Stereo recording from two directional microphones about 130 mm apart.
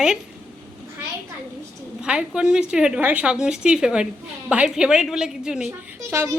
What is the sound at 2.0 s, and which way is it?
A woman's voice, 5° right (ahead or behind).